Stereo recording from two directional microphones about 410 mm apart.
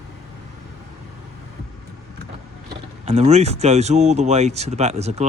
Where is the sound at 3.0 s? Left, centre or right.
Centre.